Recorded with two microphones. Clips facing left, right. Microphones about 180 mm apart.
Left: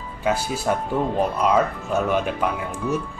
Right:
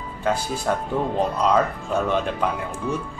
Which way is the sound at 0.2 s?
5° left (ahead or behind).